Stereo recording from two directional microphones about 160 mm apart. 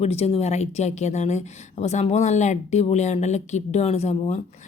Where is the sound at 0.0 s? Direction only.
40° left (ahead or behind).